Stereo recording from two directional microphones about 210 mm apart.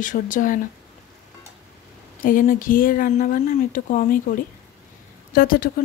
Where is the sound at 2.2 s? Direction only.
40° left (ahead or behind).